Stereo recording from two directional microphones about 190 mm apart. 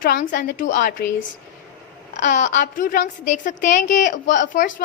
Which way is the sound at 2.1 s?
40° left (ahead or behind).